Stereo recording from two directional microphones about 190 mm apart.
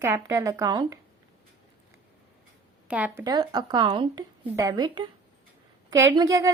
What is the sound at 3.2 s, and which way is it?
A woman's voice, 20° right (ahead or behind).